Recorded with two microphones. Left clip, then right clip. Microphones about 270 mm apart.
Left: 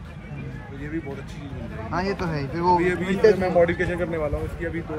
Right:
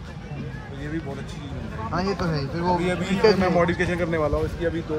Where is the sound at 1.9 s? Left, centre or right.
Left.